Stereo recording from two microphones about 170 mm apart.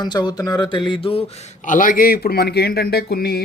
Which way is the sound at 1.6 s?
50° left (ahead or behind).